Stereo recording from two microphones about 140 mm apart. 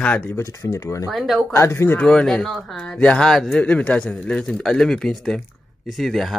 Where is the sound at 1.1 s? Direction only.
Centre (ahead or behind).